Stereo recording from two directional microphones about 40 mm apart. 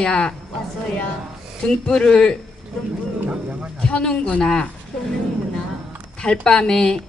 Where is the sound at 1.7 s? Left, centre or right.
Left.